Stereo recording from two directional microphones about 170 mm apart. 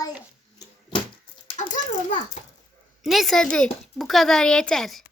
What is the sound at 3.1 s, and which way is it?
Speech, centre (ahead or behind).